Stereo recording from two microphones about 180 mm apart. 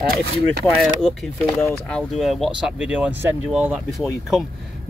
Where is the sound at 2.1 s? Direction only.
Centre (ahead or behind).